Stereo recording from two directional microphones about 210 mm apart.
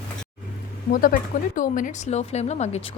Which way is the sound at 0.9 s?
40° left (ahead or behind).